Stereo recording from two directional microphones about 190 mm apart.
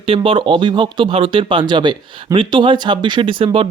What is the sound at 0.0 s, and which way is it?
Speech, 30° right (ahead or behind).